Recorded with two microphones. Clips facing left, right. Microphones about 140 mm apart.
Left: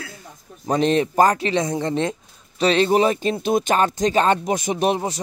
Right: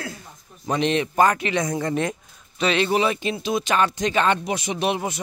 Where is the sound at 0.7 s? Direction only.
40° left (ahead or behind).